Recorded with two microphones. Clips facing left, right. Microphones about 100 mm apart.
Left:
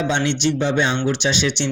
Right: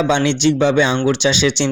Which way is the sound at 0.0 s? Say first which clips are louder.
Right 5 dB; 90° right.